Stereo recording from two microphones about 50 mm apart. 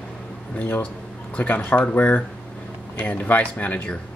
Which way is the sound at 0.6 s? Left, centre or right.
Left.